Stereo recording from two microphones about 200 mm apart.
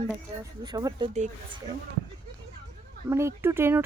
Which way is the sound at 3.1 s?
10° right (ahead or behind).